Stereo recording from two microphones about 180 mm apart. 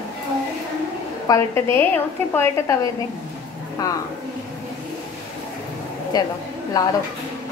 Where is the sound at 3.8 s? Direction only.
20° left (ahead or behind).